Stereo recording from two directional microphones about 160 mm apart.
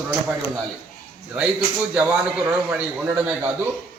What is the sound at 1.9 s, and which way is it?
Speech, 5° right (ahead or behind).